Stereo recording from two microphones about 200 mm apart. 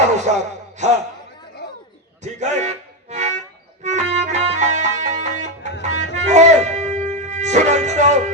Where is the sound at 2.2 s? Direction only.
35° right (ahead or behind).